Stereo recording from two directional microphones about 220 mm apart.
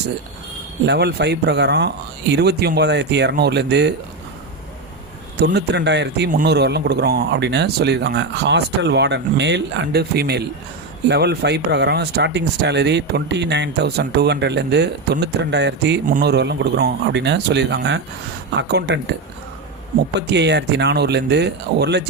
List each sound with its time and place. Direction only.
0.9 s a man's voice: 50° right (ahead or behind)
5.4 s a man's voice: 50° right (ahead or behind)
20.1 s a man's voice: 50° right (ahead or behind)